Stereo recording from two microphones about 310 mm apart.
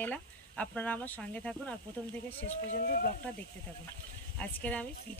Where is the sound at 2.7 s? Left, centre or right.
Left.